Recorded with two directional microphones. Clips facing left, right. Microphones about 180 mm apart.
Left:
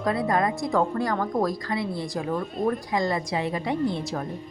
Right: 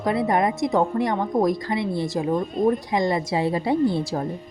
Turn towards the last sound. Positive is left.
turn(degrees=-30)  # may be behind; listen again after turning